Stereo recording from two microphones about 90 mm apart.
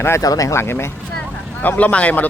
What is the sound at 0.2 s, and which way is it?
Speech, 40° left (ahead or behind).